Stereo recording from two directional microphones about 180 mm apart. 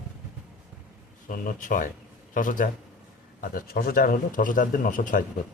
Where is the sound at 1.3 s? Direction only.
50° left (ahead or behind).